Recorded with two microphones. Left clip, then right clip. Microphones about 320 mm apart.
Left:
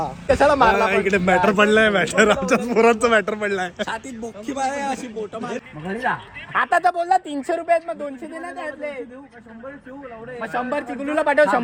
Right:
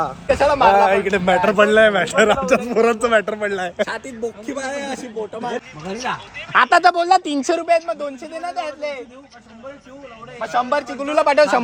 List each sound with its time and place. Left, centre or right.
0.3 s a man's voice: right
0.9 s a man's voice: centre
5.8 s speech: centre
6.5 s speech: right
10.4 s speech: centre